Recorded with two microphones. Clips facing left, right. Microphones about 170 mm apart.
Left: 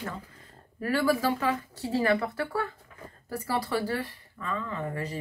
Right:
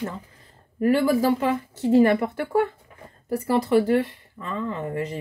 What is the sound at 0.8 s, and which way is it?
Speech, 15° right (ahead or behind).